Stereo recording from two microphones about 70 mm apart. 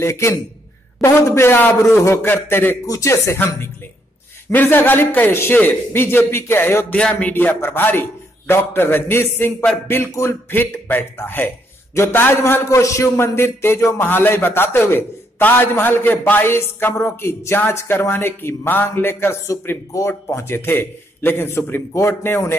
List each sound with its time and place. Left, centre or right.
0.0 s a man's voice: left
2.9 s a man's voice: left
7.0 s a man's voice: centre; by 12.6 s left
12.6 s a man's voice: left
19.9 s speech: left